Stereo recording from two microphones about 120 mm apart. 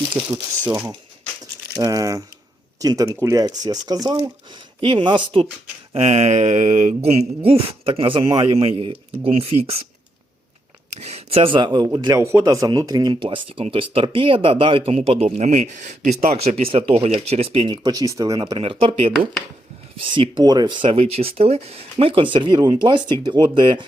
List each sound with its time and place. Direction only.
0.7 s speech: 25° right (ahead or behind)
5.9 s speech: 65° right (ahead or behind)
11.0 s speech: 55° right (ahead or behind); by 11.9 s 40° right (ahead or behind)
12.0 s speech: 25° right (ahead or behind)
18.6 s speech: 50° right (ahead or behind)